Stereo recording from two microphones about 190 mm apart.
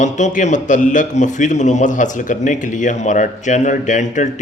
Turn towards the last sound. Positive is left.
turn(degrees=40)  # may be behind; listen again after turning